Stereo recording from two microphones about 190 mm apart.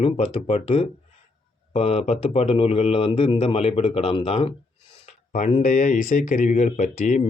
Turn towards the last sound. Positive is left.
turn(degrees=40)  # may be behind; listen again after turning